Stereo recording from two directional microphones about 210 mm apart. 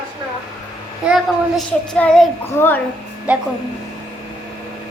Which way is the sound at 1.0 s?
Centre (ahead or behind).